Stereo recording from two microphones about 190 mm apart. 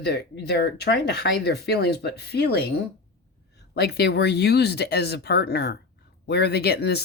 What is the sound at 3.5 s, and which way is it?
Speech, 60° left (ahead or behind).